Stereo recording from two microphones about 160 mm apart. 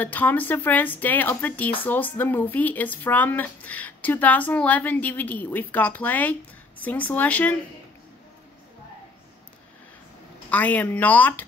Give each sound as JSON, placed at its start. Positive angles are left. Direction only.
{"t": 0.0, "sound": "speech", "side_deg": 10}
{"t": 10.5, "sound": "speech", "side_deg": 10}